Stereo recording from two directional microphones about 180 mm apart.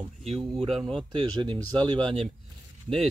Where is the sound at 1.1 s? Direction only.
25° right (ahead or behind).